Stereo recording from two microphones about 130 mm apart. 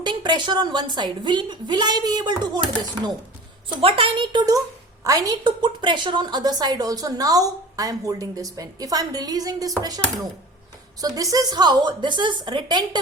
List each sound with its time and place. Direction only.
0.0 s a woman's voice: 35° right (ahead or behind)
3.8 s a woman's voice: 45° right (ahead or behind); by 10.0 s 30° right (ahead or behind)
11.0 s a woman's voice: 25° right (ahead or behind)